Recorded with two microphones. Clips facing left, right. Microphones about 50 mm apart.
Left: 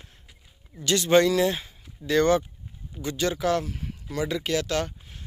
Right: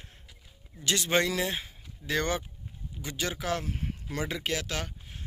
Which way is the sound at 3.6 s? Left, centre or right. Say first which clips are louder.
Even; right.